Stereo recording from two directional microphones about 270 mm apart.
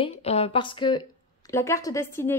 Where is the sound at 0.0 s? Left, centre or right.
Left.